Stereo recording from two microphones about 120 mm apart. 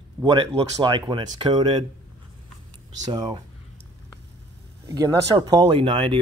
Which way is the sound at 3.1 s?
35° right (ahead or behind).